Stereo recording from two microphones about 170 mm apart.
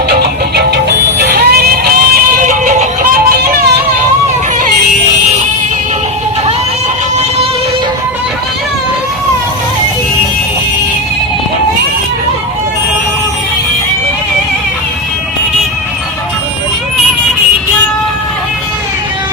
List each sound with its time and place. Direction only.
0.1 s music: 70° right (ahead or behind); by 3.5 s 55° right (ahead or behind)